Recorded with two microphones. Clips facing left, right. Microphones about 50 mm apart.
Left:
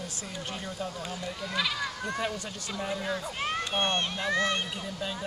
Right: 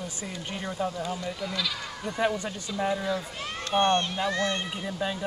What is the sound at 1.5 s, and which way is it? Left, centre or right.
Speech, left.